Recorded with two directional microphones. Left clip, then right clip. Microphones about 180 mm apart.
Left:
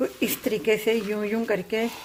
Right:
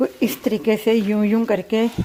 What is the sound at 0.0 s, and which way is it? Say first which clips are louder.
A woman's voice: right 5 dB; 25° right (ahead or behind).